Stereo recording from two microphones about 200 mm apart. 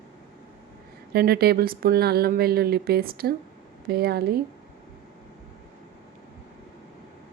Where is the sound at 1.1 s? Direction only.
50° right (ahead or behind).